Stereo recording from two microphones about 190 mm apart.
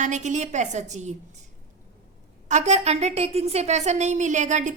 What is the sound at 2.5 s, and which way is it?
A woman's voice, 35° right (ahead or behind).